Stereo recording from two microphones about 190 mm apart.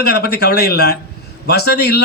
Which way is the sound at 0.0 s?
55° left (ahead or behind).